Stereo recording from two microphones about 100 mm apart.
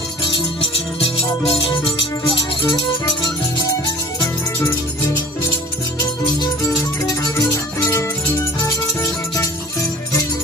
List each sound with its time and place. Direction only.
0.3 s music: 65° left (ahead or behind)
6.6 s music: 30° left (ahead or behind)